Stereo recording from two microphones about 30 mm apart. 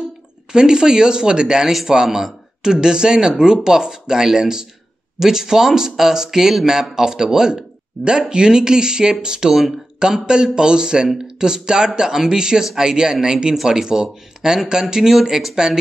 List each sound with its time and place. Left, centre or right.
0.5 s speech: right
9.5 s speech: centre
9.9 s speech: right